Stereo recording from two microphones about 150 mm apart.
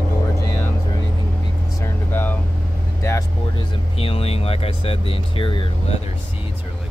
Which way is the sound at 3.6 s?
40° left (ahead or behind).